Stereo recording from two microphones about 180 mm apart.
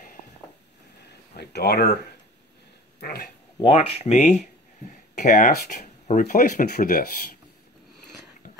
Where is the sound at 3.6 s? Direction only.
30° left (ahead or behind); by 7.0 s 50° left (ahead or behind).